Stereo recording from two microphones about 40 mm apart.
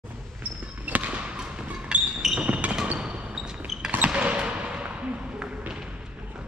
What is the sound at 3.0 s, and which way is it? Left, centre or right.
Basketball bounce, right.